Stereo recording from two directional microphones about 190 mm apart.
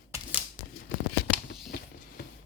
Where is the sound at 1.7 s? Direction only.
50° left (ahead or behind).